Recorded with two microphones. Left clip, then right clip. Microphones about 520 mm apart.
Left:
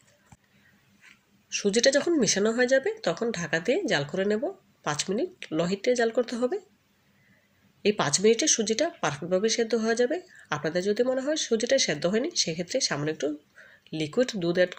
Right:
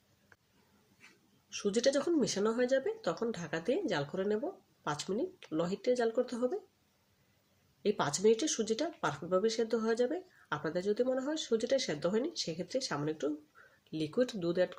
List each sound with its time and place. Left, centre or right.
1.5 s speech: left
7.8 s speech: left